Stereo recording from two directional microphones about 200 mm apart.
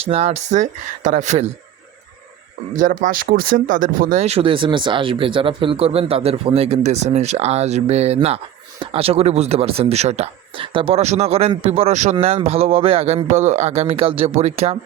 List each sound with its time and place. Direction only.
0.0 s speech: 30° right (ahead or behind)
2.7 s speech: 40° right (ahead or behind)